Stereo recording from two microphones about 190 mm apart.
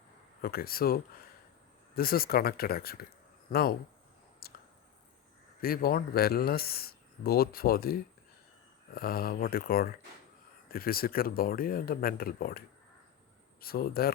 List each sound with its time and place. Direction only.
0.4 s speech: 50° left (ahead or behind)
4.4 s a sound: 55° left (ahead or behind)
5.6 s speech: 50° left (ahead or behind)